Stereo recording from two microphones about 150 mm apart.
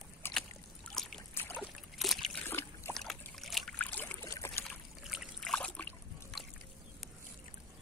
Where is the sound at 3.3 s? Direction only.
Centre (ahead or behind).